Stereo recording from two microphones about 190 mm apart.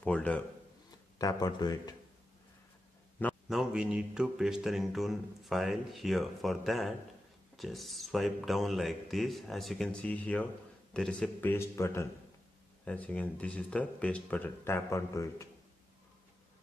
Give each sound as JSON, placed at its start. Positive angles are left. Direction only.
{"t": 0.0, "sound": "a man's voice", "side_deg": 5}
{"t": 1.1, "sound": "speech", "side_deg": 20}
{"t": 3.4, "sound": "speech", "side_deg": -5}